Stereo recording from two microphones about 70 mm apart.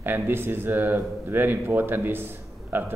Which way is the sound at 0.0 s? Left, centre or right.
Right.